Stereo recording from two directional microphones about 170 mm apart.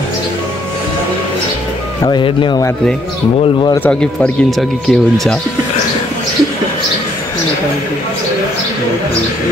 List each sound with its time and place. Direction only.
2.0 s speech: 30° left (ahead or behind)
3.8 s speech: 5° left (ahead or behind)